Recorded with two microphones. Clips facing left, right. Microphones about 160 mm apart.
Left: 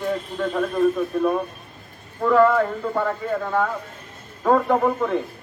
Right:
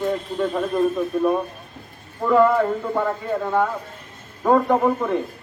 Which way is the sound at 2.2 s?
5° right (ahead or behind).